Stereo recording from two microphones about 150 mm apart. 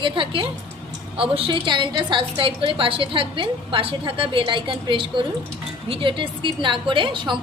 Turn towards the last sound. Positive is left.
turn(degrees=-30)  # may be behind; listen again after turning